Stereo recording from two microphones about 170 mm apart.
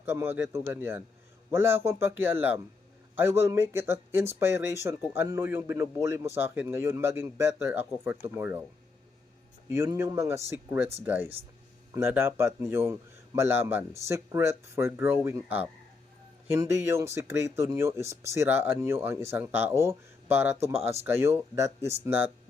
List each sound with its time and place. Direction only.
0.0 s a man's voice: 15° right (ahead or behind)
9.6 s a man's voice: 20° right (ahead or behind)
20.7 s speech: 35° right (ahead or behind)
21.0 s a man's voice: 15° right (ahead or behind)